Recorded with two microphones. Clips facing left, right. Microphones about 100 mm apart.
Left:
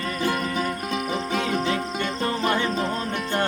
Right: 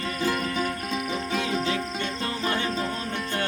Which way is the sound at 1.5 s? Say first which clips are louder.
Left 2 dB; 50° left (ahead or behind).